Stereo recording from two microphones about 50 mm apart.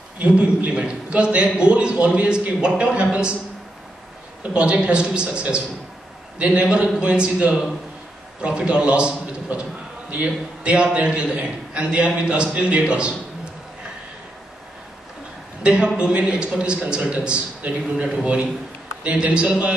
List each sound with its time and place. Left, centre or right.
0.2 s a man's voice: right
4.4 s a man's voice: right
8.4 s a man's voice: right
15.6 s a man's voice: right